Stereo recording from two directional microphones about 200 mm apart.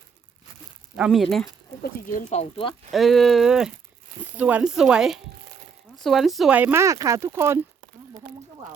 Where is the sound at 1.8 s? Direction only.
40° left (ahead or behind).